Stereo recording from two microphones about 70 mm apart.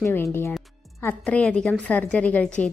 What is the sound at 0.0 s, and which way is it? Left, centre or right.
Speech, left.